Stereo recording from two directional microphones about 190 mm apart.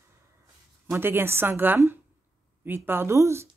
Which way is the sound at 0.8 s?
10° right (ahead or behind).